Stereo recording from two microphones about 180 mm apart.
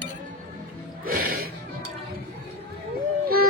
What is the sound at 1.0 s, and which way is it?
Music, 55° right (ahead or behind).